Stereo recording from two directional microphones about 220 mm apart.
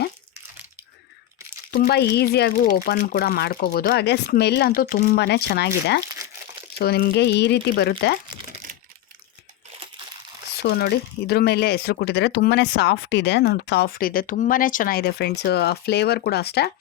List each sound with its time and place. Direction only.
1.7 s speech: 45° left (ahead or behind)
10.6 s speech: 50° left (ahead or behind)